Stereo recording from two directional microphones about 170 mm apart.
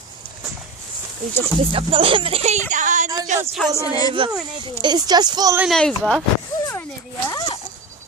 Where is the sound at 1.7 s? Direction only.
30° right (ahead or behind); by 3.1 s 45° right (ahead or behind).